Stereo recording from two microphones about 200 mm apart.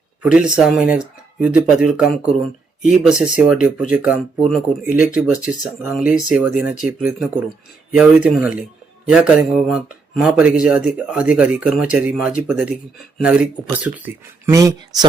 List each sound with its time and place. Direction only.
0.2 s speech: 5° right (ahead or behind)
7.9 s speech: 5° right (ahead or behind)